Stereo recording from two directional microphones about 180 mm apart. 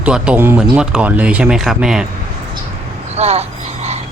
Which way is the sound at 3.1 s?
35° right (ahead or behind).